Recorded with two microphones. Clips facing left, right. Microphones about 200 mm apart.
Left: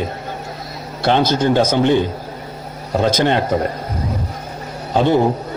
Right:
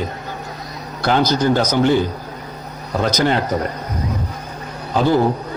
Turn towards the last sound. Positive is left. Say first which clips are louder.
# left 1 dB
turn(degrees=25)  # may be behind; listen again after turning